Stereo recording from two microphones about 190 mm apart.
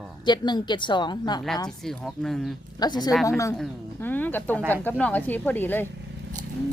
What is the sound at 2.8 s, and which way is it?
Speech, 20° left (ahead or behind).